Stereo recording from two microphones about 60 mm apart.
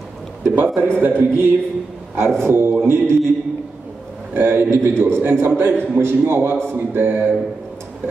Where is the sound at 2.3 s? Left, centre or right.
Right.